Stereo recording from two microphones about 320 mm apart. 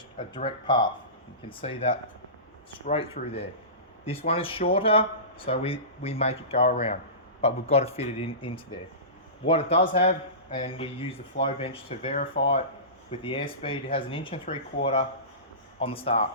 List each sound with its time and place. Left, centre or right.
0.2 s speech: centre